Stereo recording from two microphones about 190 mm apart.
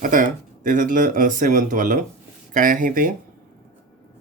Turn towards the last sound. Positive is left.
turn(degrees=-45)  # may be behind; listen again after turning